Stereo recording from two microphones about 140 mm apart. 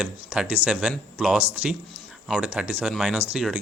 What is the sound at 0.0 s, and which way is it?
A man's voice, 10° right (ahead or behind).